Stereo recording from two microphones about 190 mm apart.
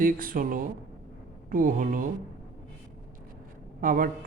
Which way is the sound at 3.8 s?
45° right (ahead or behind).